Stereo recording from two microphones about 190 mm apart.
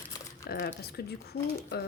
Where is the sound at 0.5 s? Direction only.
55° left (ahead or behind).